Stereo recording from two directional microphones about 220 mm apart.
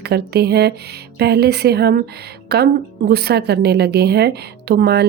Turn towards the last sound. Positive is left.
turn(degrees=-45)  # may be behind; listen again after turning